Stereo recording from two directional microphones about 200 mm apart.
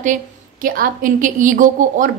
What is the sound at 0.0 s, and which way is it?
A woman's voice, 40° right (ahead or behind).